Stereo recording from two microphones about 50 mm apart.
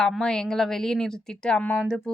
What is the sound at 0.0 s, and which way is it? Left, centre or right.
A woman's voice, centre.